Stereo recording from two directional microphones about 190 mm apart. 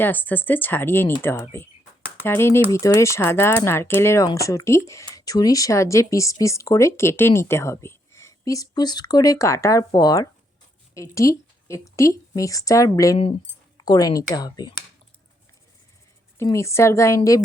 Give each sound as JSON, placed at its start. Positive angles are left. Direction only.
{"t": 0.0, "sound": "a woman's voice", "side_deg": 10}
{"t": 16.4, "sound": "speech", "side_deg": 15}